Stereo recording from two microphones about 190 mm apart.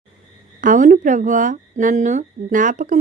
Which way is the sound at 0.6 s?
40° right (ahead or behind).